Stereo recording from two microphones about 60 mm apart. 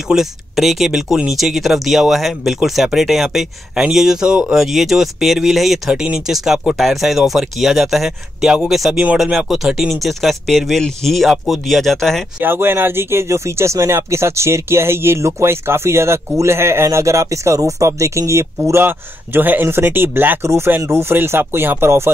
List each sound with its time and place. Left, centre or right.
0.1 s speech: centre
12.4 s speech: right
18.9 s speech: right